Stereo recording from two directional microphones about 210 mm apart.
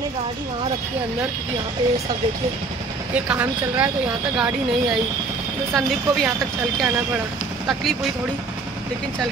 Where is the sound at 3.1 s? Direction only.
5° right (ahead or behind).